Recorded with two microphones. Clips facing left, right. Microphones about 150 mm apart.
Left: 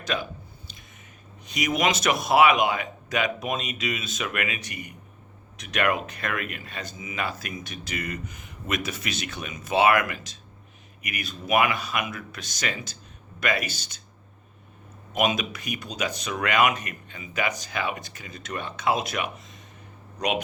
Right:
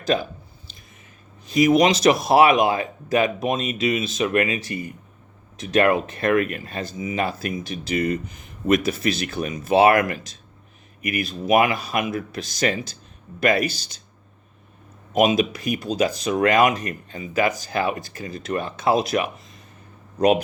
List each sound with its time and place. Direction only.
0.1 s speech: 35° right (ahead or behind)
1.5 s speech: 35° right (ahead or behind)
15.4 s speech: 35° right (ahead or behind)